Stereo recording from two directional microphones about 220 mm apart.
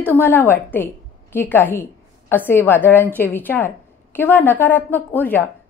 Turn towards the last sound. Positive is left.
turn(degrees=10)  # may be behind; listen again after turning